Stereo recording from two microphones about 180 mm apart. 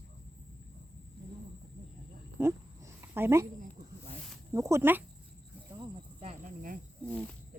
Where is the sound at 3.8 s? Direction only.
40° right (ahead or behind).